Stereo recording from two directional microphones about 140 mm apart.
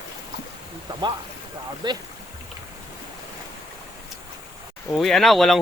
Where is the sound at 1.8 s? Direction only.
30° right (ahead or behind).